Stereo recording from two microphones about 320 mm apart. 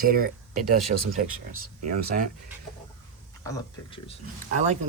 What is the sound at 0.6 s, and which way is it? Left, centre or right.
Speech, right.